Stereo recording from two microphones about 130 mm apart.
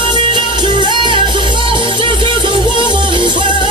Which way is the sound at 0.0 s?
35° right (ahead or behind).